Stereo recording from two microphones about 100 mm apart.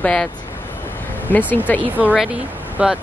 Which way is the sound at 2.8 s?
10° right (ahead or behind).